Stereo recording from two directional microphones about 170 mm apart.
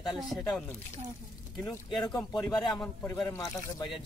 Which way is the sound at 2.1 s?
5° left (ahead or behind).